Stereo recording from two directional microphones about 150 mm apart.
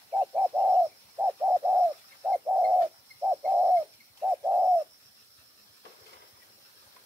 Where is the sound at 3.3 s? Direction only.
15° right (ahead or behind).